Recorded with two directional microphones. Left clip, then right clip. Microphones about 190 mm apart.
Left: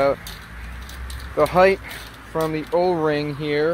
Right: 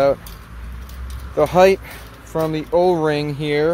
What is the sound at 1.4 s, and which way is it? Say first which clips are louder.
Speech: right 3 dB; 10° right (ahead or behind).